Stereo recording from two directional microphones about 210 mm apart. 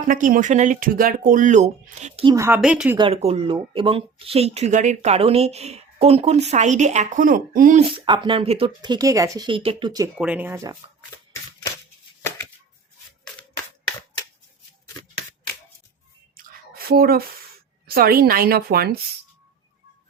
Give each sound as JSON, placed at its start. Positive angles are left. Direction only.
{"t": 0.1, "sound": "speech", "side_deg": -40}
{"t": 2.3, "sound": "speech", "side_deg": -15}
{"t": 3.0, "sound": "speech", "side_deg": -30}
{"t": 7.9, "sound": "speech", "side_deg": -25}
{"t": 10.2, "sound": "speech", "side_deg": -5}
{"t": 16.4, "sound": "a sound", "side_deg": -45}
{"t": 17.8, "sound": "a woman's voice", "side_deg": -45}